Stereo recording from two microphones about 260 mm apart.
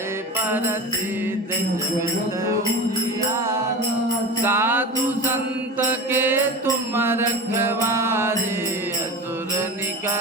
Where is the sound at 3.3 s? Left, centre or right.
Centre.